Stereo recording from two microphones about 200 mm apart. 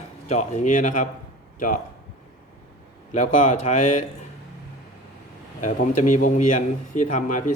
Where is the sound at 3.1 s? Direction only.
40° left (ahead or behind).